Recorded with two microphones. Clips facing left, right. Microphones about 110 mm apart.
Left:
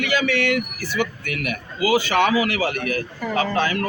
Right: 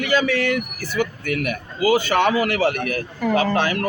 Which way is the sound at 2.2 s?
55° right (ahead or behind).